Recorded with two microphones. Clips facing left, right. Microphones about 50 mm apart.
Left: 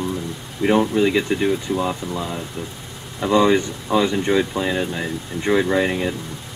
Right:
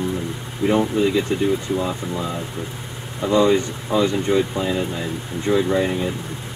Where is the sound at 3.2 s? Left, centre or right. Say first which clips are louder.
Left 1 dB; left.